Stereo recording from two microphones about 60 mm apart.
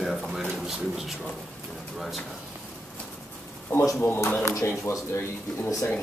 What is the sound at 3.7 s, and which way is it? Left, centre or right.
Speech, left.